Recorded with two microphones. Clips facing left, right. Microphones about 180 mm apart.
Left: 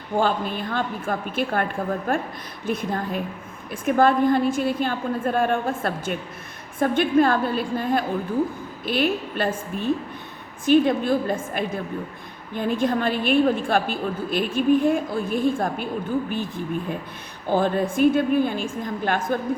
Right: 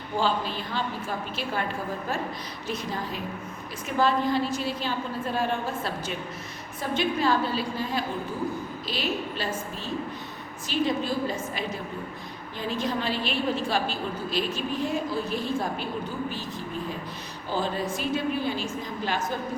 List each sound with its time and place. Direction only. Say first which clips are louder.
0.2 s a woman's voice: left 4 dB; 55° left (ahead or behind)
17.5 s a woman's voice: left 7 dB; 55° left (ahead or behind)